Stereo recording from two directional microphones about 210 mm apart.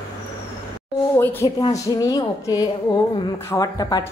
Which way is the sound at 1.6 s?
15° left (ahead or behind).